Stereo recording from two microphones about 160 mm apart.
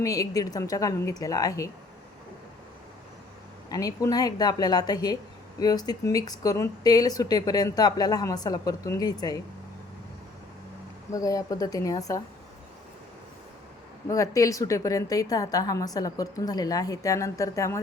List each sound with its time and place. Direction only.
0.0 s speech: 20° left (ahead or behind)
3.7 s speech: 20° left (ahead or behind)
11.1 s speech: 20° left (ahead or behind)
14.1 s speech: 20° left (ahead or behind)